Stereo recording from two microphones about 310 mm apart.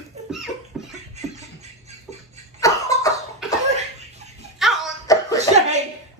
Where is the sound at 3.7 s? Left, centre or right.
Right.